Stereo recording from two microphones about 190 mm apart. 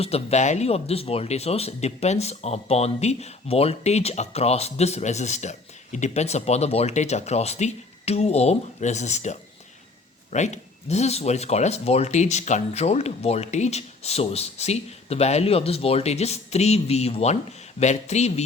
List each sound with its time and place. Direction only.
0.0 s speech: 35° left (ahead or behind)